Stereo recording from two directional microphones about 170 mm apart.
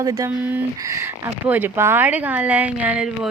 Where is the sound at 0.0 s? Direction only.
20° right (ahead or behind).